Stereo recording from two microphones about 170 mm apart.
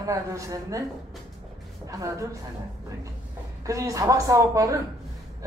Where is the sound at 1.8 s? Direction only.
20° right (ahead or behind).